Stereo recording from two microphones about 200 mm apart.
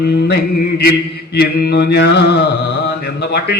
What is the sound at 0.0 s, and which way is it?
A man's voice, 55° left (ahead or behind).